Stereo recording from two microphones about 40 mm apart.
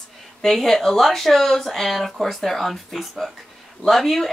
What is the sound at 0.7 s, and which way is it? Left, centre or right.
Speech, centre.